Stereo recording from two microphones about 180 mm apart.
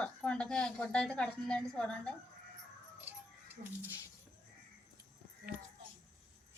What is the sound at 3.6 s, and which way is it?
Speech, 50° right (ahead or behind).